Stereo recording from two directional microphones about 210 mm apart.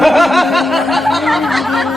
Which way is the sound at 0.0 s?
Centre (ahead or behind).